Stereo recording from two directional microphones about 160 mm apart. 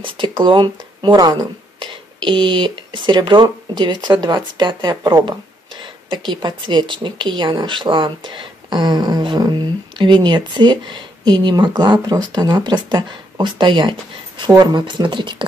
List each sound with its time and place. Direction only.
0.0 s speech: 30° right (ahead or behind)